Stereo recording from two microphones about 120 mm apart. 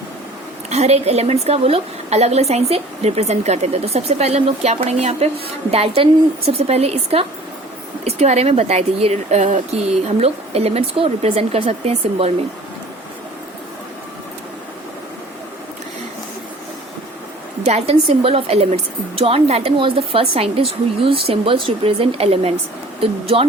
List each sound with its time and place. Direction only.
0.7 s a woman's voice: 65° right (ahead or behind)
17.6 s a woman's voice: 65° right (ahead or behind); by 23.5 s 50° right (ahead or behind)